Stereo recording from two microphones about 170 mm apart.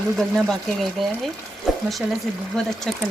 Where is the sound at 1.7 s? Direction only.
Centre (ahead or behind).